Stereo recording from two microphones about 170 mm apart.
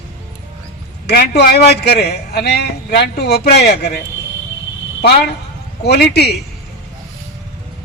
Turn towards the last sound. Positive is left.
turn(degrees=75)  # may be behind; listen again after turning